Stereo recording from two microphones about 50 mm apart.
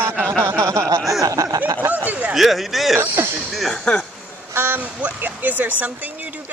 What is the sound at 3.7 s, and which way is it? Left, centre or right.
Speech, centre.